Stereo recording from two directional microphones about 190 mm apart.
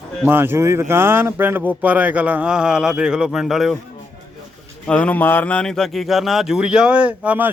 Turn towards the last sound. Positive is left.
turn(degrees=-10)  # may be behind; listen again after turning